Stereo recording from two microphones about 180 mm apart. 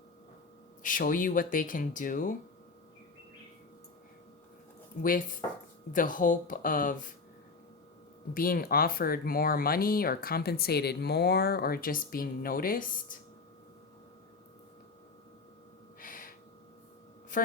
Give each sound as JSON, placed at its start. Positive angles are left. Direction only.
{"t": 0.8, "sound": "speech", "side_deg": 45}
{"t": 4.9, "sound": "speech", "side_deg": 45}
{"t": 8.3, "sound": "speech", "side_deg": 55}
{"t": 16.0, "sound": "gasp", "side_deg": 50}